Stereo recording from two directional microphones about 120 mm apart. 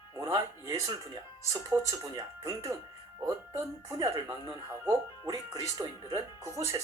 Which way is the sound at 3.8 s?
25° right (ahead or behind).